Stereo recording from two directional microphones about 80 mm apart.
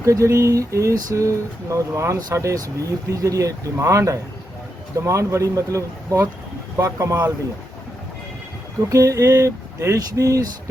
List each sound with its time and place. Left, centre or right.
0.0 s speech: right
8.9 s speech: right